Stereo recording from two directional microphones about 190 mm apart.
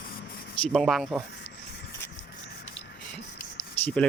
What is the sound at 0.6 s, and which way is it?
Speech, centre (ahead or behind).